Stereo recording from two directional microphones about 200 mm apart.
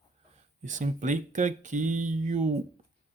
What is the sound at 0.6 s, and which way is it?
Speech, 40° right (ahead or behind).